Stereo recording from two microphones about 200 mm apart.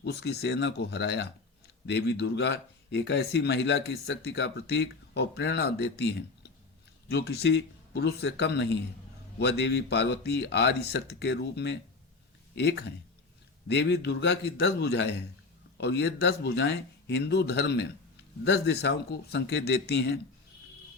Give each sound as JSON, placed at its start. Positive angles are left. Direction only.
{"t": 0.0, "sound": "speech", "side_deg": 55}